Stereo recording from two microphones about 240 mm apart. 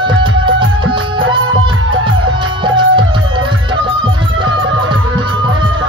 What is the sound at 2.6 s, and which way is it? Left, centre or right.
Music, centre.